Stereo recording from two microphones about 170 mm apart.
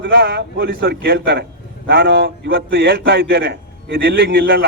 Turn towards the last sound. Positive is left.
turn(degrees=-70)  # may be behind; listen again after turning